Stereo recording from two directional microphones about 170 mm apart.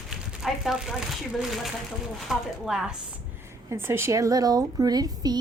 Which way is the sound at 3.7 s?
15° right (ahead or behind).